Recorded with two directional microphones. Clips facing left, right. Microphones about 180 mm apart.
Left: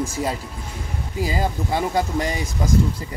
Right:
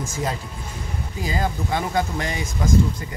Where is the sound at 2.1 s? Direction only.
35° left (ahead or behind).